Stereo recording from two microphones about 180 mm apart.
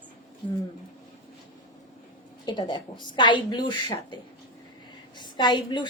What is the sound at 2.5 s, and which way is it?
A woman's voice, 25° left (ahead or behind).